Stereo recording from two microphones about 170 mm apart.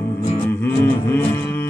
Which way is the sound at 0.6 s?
15° left (ahead or behind).